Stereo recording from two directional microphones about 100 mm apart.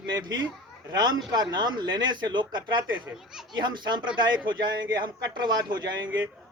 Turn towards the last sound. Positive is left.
turn(degrees=-45)  # may be behind; listen again after turning